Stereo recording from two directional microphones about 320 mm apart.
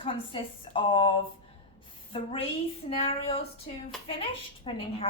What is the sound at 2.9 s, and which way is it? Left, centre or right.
Speech, centre.